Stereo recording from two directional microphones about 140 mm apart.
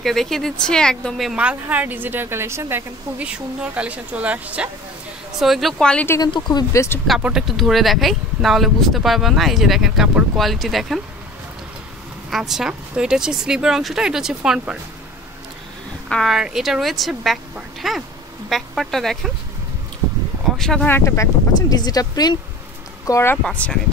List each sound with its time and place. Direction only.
0.0 s speech: centre (ahead or behind)
6.0 s speech: 25° left (ahead or behind)
7.1 s speech: 5° right (ahead or behind)
12.3 s speech: centre (ahead or behind)
16.1 s speech: centre (ahead or behind)
20.5 s speech: 5° left (ahead or behind); by 23.3 s 20° left (ahead or behind)
23.3 s speech: 10° left (ahead or behind)